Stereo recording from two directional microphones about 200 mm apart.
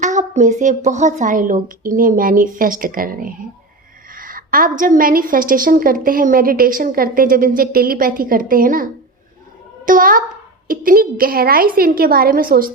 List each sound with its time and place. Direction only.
0.0 s a woman's voice: 35° right (ahead or behind)
4.1 s a sound: 45° right (ahead or behind)
4.8 s a woman's voice: 45° right (ahead or behind)